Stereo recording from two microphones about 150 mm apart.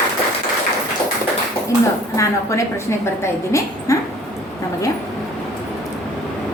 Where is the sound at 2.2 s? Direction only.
20° left (ahead or behind).